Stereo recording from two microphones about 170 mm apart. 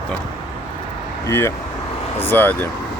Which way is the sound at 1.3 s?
15° left (ahead or behind).